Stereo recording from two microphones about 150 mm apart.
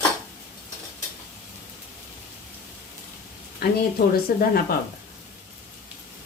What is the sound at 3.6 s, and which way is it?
Speech, 90° left.